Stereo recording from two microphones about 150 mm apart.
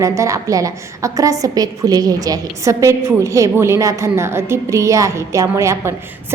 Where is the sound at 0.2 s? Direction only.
20° right (ahead or behind).